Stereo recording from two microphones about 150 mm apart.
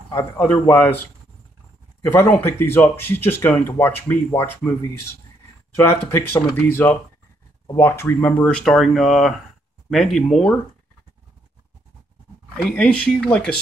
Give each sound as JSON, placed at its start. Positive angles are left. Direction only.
{"t": 0.1, "sound": "speech", "side_deg": 15}
{"t": 2.0, "sound": "speech", "side_deg": 15}
{"t": 6.1, "sound": "speech", "side_deg": 15}
{"t": 12.6, "sound": "speech", "side_deg": 5}